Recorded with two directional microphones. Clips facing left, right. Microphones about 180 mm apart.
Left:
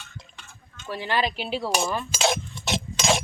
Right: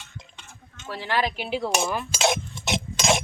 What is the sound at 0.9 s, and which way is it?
Speech, 15° left (ahead or behind).